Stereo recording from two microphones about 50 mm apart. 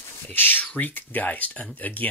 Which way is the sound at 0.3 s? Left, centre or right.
Left.